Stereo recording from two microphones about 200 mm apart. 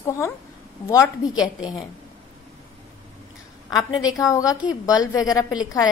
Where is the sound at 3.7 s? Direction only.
15° left (ahead or behind).